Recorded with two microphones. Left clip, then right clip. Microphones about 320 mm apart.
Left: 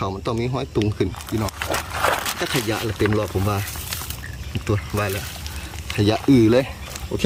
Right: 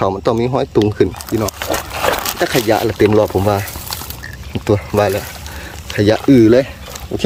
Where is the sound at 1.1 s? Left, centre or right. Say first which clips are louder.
Right 7 dB; right.